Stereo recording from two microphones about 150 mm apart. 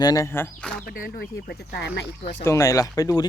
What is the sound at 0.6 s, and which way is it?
Speech, 5° left (ahead or behind).